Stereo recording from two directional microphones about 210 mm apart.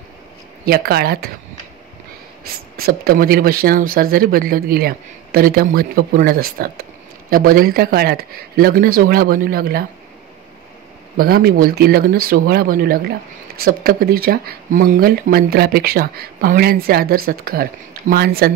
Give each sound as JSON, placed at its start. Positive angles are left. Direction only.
{"t": 0.7, "sound": "speech", "side_deg": -45}
{"t": 2.4, "sound": "speech", "side_deg": -45}
{"t": 11.1, "sound": "speech", "side_deg": -45}